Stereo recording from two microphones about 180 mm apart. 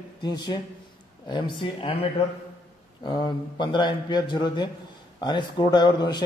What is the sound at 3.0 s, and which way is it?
Speech, 25° left (ahead or behind).